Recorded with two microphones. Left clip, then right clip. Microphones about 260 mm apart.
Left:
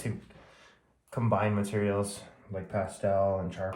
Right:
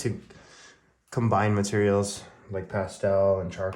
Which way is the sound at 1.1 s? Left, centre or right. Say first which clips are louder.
Right 4 dB; right.